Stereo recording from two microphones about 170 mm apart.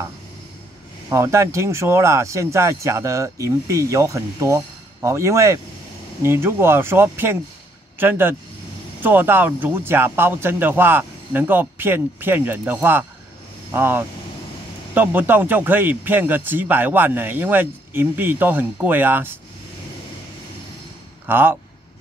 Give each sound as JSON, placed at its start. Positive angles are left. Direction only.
{"t": 1.1, "sound": "speech", "side_deg": -15}
{"t": 21.3, "sound": "speech", "side_deg": -10}